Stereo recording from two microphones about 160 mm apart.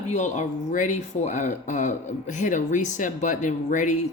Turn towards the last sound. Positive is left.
turn(degrees=50)  # may be behind; listen again after turning